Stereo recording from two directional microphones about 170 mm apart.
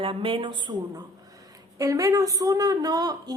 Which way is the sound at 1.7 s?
20° right (ahead or behind).